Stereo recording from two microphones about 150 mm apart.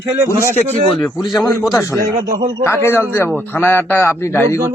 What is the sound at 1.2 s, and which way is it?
Speech, 25° left (ahead or behind).